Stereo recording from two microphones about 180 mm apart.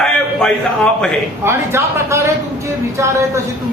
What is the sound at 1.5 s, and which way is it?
A woman's voice, 15° right (ahead or behind).